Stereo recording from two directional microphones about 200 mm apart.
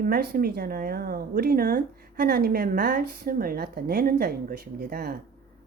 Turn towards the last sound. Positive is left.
turn(degrees=-50)  # may be behind; listen again after turning